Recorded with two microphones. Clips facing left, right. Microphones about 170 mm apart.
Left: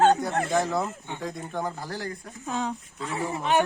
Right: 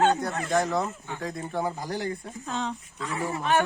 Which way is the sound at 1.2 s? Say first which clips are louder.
Right 2 dB; centre (ahead or behind).